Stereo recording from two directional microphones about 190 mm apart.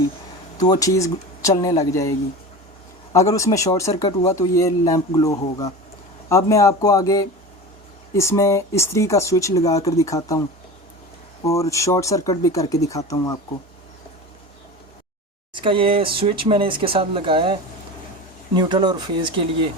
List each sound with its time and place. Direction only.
0.7 s speech: 15° left (ahead or behind)
11.4 s speech: 15° left (ahead or behind)
15.5 s speech: 25° right (ahead or behind)